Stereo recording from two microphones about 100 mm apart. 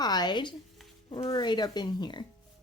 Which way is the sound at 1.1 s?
75° left (ahead or behind).